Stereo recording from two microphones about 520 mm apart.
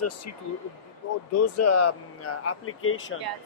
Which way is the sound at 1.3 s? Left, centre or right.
Left.